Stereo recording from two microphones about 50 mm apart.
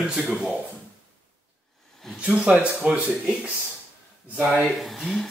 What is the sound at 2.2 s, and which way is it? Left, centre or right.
Speech, right.